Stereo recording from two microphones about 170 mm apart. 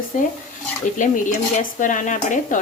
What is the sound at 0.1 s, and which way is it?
Speech, 50° left (ahead or behind).